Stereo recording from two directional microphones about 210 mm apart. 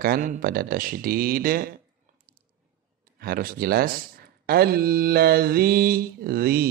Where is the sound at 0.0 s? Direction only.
40° right (ahead or behind).